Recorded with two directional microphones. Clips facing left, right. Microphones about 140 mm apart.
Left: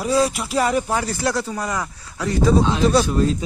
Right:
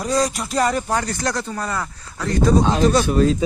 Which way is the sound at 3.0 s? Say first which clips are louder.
Right 3 dB; 85° right.